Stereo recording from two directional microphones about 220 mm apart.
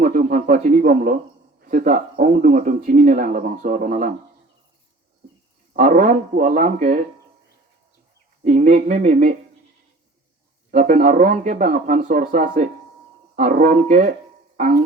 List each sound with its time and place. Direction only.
0.0 s a man's voice: 35° right (ahead or behind)
5.7 s speech: 35° right (ahead or behind)
8.4 s speech: 35° right (ahead or behind)
10.7 s speech: 40° right (ahead or behind)